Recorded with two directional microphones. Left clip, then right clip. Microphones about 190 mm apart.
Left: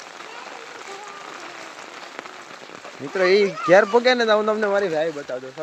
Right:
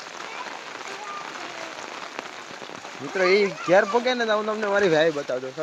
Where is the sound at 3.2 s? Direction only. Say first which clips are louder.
Left 3 dB; 15° left (ahead or behind).